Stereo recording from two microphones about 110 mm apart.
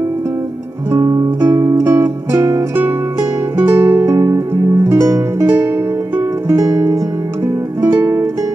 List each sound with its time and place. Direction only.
0.9 s music: 25° right (ahead or behind)
3.6 s music: 35° right (ahead or behind)
8.0 s music: 25° right (ahead or behind)